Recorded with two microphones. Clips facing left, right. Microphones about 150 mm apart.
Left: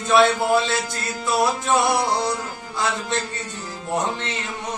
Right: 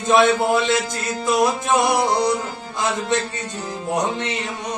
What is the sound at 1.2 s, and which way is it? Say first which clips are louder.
Music: right 2 dB; 20° right (ahead or behind).